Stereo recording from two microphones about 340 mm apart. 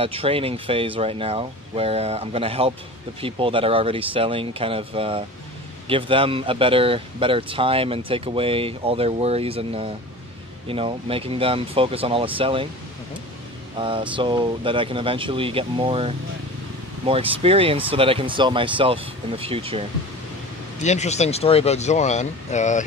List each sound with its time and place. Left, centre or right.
0.0 s speech: centre
13.7 s speech: centre
20.8 s speech: centre